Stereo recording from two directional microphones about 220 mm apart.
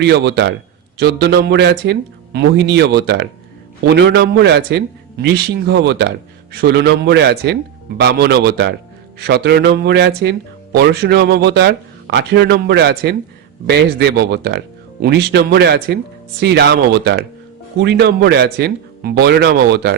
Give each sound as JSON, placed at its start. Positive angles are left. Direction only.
{"t": 0.0, "sound": "speech", "side_deg": -50}